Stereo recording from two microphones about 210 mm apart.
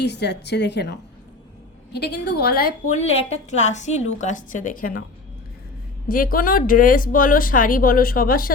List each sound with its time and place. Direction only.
0.0 s a woman's voice: 55° left (ahead or behind)
6.1 s a woman's voice: 40° left (ahead or behind)